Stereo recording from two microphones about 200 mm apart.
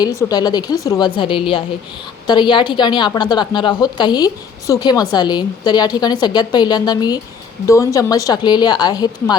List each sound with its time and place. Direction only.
0.2 s a woman's voice: 20° left (ahead or behind)